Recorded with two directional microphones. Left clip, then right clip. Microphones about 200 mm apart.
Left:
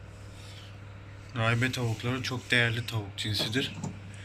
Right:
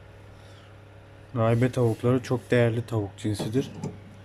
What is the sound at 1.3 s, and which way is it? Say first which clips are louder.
Speech: right 4 dB; 30° right (ahead or behind).